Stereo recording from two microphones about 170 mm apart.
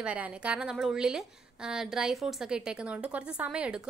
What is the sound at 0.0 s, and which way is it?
A woman's voice, 5° right (ahead or behind).